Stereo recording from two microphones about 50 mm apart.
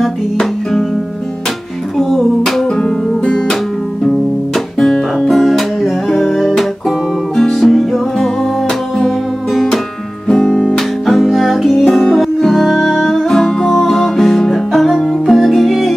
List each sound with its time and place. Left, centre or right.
0.0 s music: centre
2.0 s music: centre
4.7 s music: centre
5.2 s music: centre
10.2 s music: centre
11.1 s music: centre